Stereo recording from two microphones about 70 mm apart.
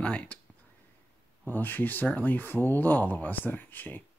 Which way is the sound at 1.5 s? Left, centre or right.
Left.